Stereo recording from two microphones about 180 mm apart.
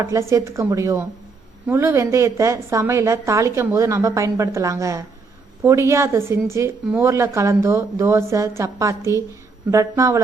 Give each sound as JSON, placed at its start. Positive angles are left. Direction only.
{"t": 0.0, "sound": "a woman's voice", "side_deg": -15}